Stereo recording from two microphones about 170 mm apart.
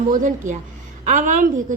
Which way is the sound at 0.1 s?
50° right (ahead or behind).